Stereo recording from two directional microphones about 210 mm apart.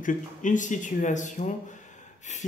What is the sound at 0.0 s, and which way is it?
Speech, 35° left (ahead or behind).